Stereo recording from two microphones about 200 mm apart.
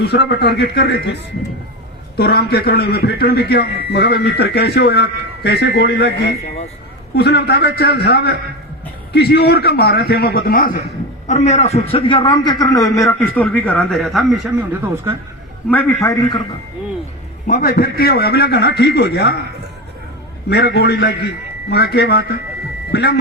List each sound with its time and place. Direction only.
0.0 s a man's voice: 55° left (ahead or behind)
11.3 s a man's voice: 35° left (ahead or behind); by 15.1 s 5° right (ahead or behind)
15.7 s a man's voice: 15° left (ahead or behind)
17.4 s a man's voice: 45° left (ahead or behind)
20.5 s a man's voice: 55° left (ahead or behind)